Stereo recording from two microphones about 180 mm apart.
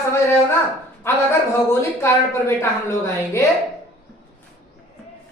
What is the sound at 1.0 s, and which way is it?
A woman's voice, 15° left (ahead or behind).